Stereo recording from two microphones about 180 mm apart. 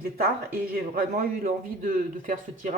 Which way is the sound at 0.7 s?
55° right (ahead or behind).